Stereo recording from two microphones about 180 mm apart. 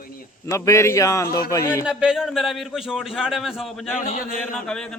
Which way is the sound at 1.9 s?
5° right (ahead or behind).